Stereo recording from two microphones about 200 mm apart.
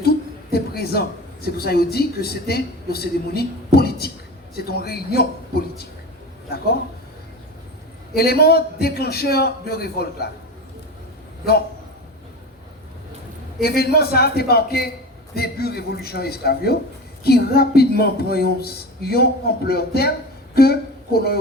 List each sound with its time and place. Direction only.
0.5 s speech: 50° left (ahead or behind)
8.1 s speech: 50° left (ahead or behind)
13.6 s speech: 50° left (ahead or behind)